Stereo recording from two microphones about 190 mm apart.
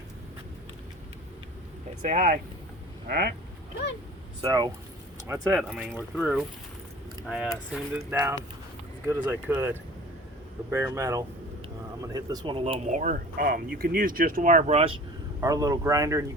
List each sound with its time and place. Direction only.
2.0 s speech: 45° right (ahead or behind)
3.1 s speech: 60° right (ahead or behind)
4.4 s speech: 20° right (ahead or behind)
5.3 s speech: 10° right (ahead or behind)
7.9 s speech: 15° right (ahead or behind); by 14.9 s 35° right (ahead or behind)
15.4 s speech: 20° right (ahead or behind)